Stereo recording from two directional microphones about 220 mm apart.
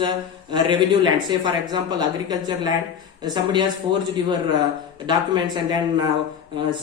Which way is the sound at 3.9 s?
20° right (ahead or behind).